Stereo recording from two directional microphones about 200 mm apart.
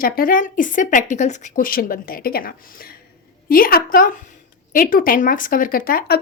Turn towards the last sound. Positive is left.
turn(degrees=50)  # may be behind; listen again after turning